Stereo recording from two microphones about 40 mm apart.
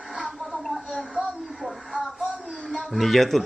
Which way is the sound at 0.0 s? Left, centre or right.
Centre.